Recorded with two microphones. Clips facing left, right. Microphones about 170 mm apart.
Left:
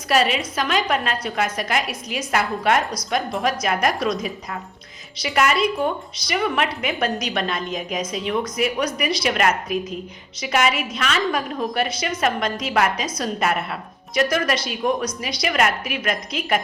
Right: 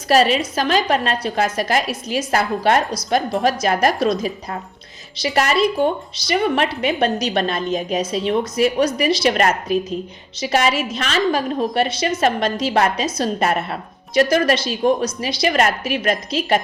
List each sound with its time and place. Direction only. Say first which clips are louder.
0.1 s a woman's voice: right 4 dB; 35° right (ahead or behind)